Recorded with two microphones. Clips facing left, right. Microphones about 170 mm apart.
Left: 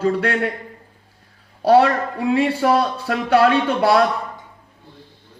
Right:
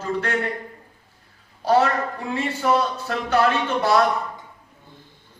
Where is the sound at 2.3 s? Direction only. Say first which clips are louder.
Left 4 dB; 65° left (ahead or behind).